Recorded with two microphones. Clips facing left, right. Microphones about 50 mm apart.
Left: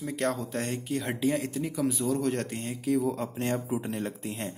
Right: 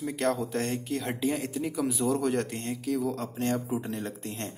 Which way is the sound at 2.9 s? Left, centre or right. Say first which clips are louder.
Left 2 dB; centre.